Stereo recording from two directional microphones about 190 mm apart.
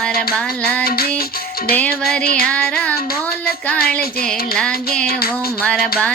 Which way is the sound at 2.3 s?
5° left (ahead or behind).